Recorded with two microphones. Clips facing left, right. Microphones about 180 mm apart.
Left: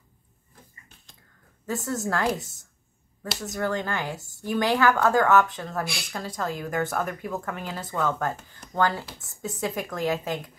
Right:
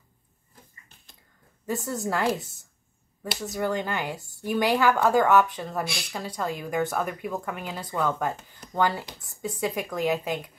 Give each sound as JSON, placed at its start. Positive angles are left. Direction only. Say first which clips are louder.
{"t": 1.8, "sound": "a woman's voice", "louder": "left 2 dB", "side_deg": -15}
{"t": 2.0, "sound": "speech", "louder": "right 1 dB", "side_deg": 0}
{"t": 3.3, "sound": "a woman's voice", "louder": "even", "side_deg": 0}
{"t": 4.6, "sound": "a woman's voice", "louder": "even", "side_deg": -15}
{"t": 5.7, "sound": "speech", "louder": "even", "side_deg": 0}